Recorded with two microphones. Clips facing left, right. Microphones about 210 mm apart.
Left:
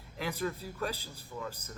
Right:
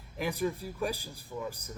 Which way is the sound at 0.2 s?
15° right (ahead or behind).